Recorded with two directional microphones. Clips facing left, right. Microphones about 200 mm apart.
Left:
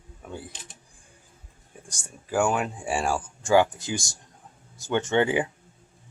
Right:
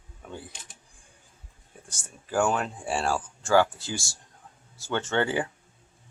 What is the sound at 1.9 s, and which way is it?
Speech, 10° left (ahead or behind).